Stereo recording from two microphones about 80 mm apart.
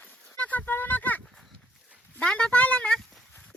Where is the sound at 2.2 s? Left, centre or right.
Centre.